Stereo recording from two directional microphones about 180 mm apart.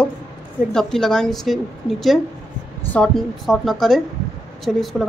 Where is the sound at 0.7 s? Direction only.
5° left (ahead or behind).